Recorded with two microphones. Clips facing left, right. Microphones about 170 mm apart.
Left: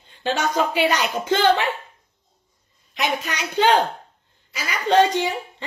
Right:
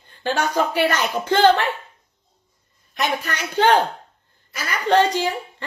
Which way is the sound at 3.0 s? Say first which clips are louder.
Right 1 dB; 15° left (ahead or behind).